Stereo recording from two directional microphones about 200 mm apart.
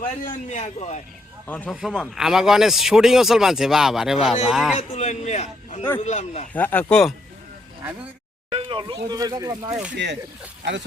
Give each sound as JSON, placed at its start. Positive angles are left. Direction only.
{"t": 0.5, "sound": "a man's voice", "side_deg": 35}
{"t": 1.5, "sound": "speech", "side_deg": 10}
{"t": 4.8, "sound": "a man's voice", "side_deg": 35}
{"t": 6.5, "sound": "speech", "side_deg": 10}
{"t": 8.4, "sound": "a sound", "side_deg": -25}
{"t": 9.0, "sound": "speech", "side_deg": -20}
{"t": 9.9, "sound": "speech", "side_deg": -60}